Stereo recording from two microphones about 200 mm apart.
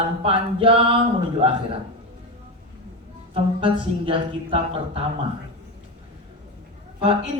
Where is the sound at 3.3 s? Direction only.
25° right (ahead or behind).